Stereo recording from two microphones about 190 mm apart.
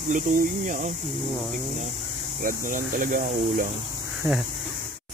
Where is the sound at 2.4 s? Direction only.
45° right (ahead or behind).